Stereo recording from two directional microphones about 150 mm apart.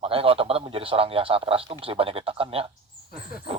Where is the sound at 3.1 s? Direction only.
85° left.